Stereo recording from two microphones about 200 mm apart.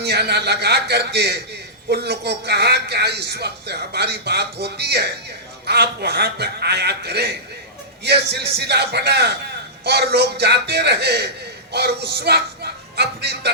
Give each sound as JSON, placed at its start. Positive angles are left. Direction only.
{"t": 0.0, "sound": "speech", "side_deg": -55}